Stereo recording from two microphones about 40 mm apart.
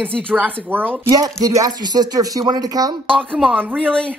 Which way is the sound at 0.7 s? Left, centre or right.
Right.